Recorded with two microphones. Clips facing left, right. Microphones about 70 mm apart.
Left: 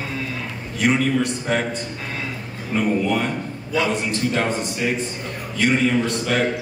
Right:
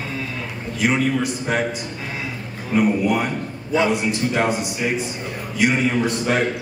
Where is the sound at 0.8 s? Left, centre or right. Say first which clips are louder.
Left 1 dB; centre.